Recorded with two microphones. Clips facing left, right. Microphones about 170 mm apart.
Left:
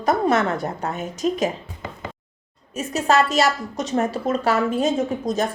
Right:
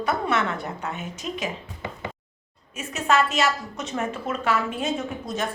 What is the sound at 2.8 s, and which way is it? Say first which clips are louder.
Speech: left 4 dB; 40° left (ahead or behind).